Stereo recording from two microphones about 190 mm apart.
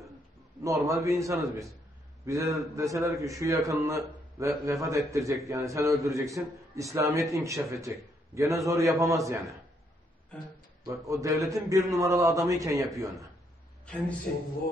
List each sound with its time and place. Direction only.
0.8 s a man's voice: 15° right (ahead or behind)
11.1 s a man's voice: 15° right (ahead or behind)
13.8 s speech: 5° left (ahead or behind)